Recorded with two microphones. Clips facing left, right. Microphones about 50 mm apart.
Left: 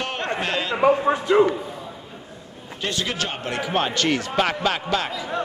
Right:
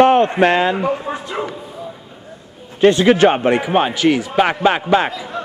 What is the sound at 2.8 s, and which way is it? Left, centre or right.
Speech, right.